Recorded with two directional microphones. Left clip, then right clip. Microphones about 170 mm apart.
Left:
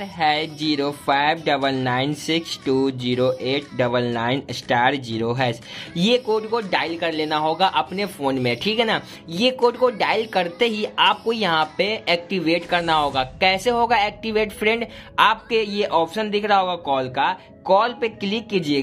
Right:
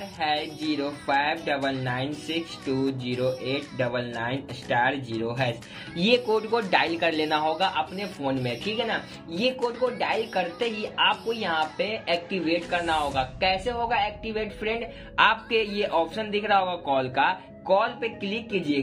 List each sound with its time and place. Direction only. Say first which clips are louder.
0.2 s speech: left 7 dB; 35° left (ahead or behind)
5.9 s a man's voice: left 3 dB; 20° left (ahead or behind)
8.0 s speech: left 6 dB; 40° left (ahead or behind)
8.5 s speech: left 8 dB; 30° left (ahead or behind)
15.1 s a man's voice: left 4 dB; 20° left (ahead or behind)
17.6 s speech: left 5 dB; 35° left (ahead or behind)